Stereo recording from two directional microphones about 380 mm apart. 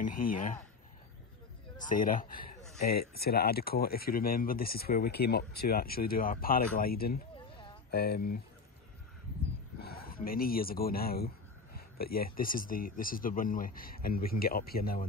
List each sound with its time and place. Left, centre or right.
0.0 s speech: left
1.8 s speech: left
9.8 s a sound: left
12.4 s speech: left